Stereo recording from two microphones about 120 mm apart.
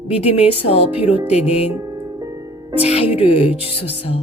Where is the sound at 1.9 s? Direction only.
35° right (ahead or behind).